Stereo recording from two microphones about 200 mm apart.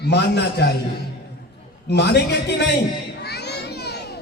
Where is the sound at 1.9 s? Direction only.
55° left (ahead or behind).